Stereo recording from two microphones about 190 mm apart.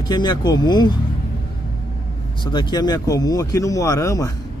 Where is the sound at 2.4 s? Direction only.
25° left (ahead or behind).